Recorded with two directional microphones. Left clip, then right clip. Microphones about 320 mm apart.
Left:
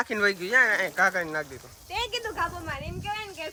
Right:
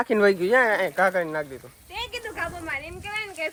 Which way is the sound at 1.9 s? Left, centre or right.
Left.